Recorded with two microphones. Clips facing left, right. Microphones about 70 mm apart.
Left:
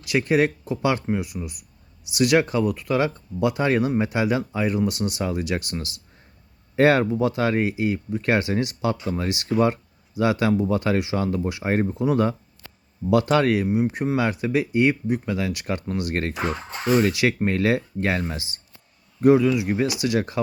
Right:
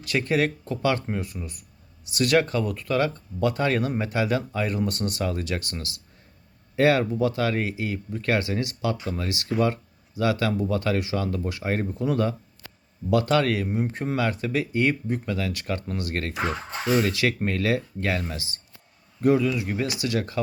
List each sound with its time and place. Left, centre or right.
0.0 s speech: centre
6.7 s speech: left